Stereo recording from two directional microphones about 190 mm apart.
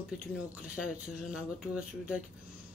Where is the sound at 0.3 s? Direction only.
5° right (ahead or behind).